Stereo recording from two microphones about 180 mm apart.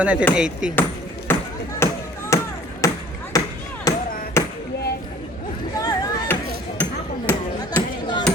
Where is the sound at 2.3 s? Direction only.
15° left (ahead or behind).